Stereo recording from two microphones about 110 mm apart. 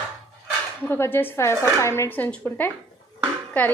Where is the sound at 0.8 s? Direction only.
20° left (ahead or behind).